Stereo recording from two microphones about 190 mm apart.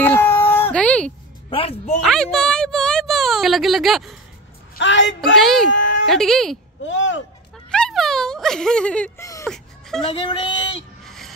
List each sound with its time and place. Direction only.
0.0 s a sound: 10° left (ahead or behind)
1.5 s speech: 30° left (ahead or behind)
2.0 s speech: 5° left (ahead or behind)
4.7 s a woman's voice: 75° left (ahead or behind)
5.3 s speech: centre (ahead or behind)
5.7 s a sound: 80° left
6.0 s speech: centre (ahead or behind)
6.8 s speech: 80° left
7.7 s a sound: 5° left (ahead or behind)
9.2 s whimper: 15° left (ahead or behind)
9.5 s a sound: centre (ahead or behind)
10.0 s music: 25° left (ahead or behind)
11.1 s music: centre (ahead or behind)